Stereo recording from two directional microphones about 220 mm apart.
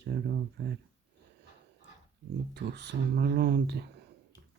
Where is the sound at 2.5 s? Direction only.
50° right (ahead or behind).